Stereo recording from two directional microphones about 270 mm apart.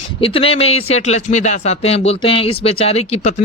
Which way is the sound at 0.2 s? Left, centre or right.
Left.